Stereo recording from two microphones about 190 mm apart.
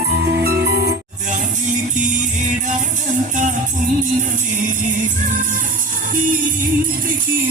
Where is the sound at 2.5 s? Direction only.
40° right (ahead or behind).